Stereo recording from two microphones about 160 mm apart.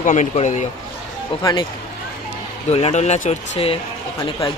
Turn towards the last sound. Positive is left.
turn(degrees=20)  # may be behind; listen again after turning